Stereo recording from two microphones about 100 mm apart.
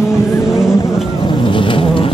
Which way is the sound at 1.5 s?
60° left (ahead or behind).